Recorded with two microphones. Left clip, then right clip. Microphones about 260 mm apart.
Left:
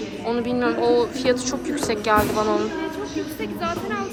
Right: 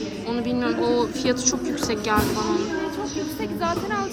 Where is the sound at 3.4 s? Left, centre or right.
Right.